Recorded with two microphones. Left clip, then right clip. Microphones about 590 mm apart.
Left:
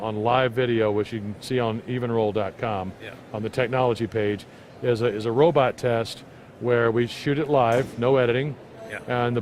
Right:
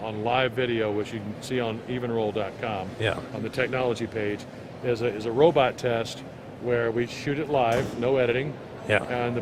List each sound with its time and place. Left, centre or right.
0.0 s speech: left